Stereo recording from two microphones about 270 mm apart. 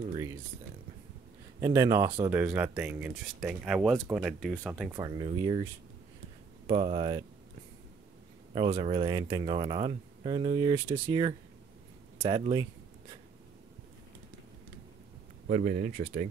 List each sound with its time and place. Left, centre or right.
1.6 s speech: centre
4.9 s speech: centre
6.7 s speech: right
8.5 s speech: right
15.4 s speech: right